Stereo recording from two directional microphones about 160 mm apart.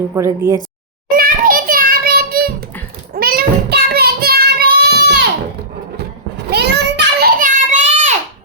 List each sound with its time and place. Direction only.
0.1 s speech: 15° right (ahead or behind)
1.1 s child singing: 60° right (ahead or behind); by 5.2 s 90° right
6.5 s child singing: 90° right; by 8.1 s 50° right (ahead or behind)